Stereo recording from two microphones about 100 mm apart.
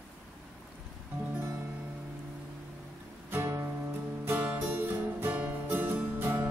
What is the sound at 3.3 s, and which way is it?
Music, 25° right (ahead or behind).